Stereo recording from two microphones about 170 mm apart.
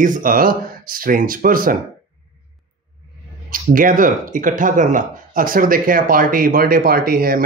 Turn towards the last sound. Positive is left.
turn(degrees=-60)  # may be behind; listen again after turning